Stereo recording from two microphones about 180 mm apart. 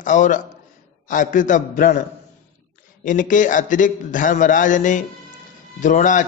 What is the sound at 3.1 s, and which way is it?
A man's voice, 45° left (ahead or behind).